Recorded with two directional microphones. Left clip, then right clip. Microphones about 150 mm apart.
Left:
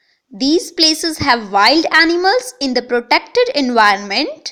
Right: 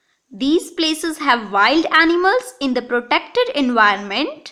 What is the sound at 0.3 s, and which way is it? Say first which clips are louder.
A woman's voice: left 4 dB; 30° left (ahead or behind).